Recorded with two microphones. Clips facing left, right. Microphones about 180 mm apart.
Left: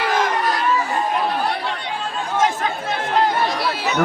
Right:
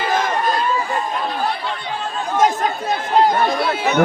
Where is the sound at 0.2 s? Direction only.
80° left.